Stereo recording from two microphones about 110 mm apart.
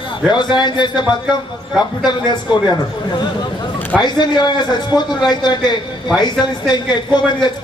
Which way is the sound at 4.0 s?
40° left (ahead or behind).